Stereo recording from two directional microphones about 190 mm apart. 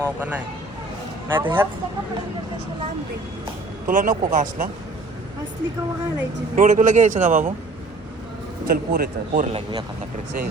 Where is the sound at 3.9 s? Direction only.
45° right (ahead or behind).